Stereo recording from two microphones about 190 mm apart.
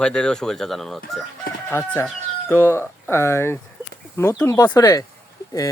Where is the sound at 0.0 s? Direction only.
5° left (ahead or behind).